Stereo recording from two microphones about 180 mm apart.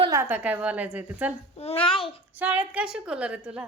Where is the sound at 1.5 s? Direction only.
35° left (ahead or behind).